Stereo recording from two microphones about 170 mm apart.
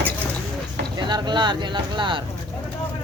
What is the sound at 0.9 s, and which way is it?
Speech, 25° right (ahead or behind).